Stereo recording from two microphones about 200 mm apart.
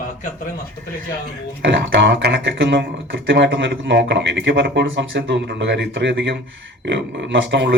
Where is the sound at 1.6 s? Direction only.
65° right (ahead or behind).